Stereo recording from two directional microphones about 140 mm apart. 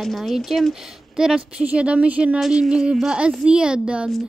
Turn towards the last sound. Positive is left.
turn(degrees=-5)  # may be behind; listen again after turning